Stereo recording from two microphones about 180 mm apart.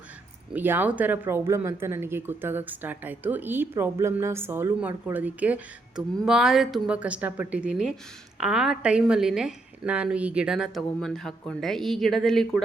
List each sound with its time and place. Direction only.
0.5 s a woman's voice: 10° right (ahead or behind)